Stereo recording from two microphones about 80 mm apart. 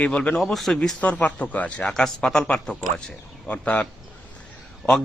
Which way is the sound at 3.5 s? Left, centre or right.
Centre.